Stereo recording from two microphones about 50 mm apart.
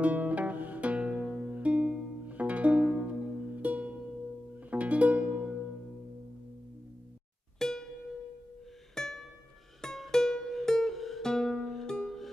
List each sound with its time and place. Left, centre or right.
0.0 s music: right
7.5 s music: centre
8.9 s music: centre